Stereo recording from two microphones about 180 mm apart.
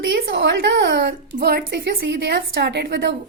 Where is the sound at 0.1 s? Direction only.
70° right (ahead or behind).